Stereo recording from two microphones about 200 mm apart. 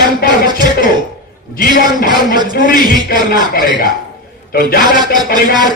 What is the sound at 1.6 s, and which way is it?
A man's voice, 45° left (ahead or behind).